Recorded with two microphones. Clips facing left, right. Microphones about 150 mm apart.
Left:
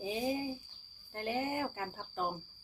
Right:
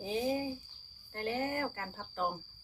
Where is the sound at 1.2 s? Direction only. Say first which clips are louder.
Right 1 dB; 15° left (ahead or behind).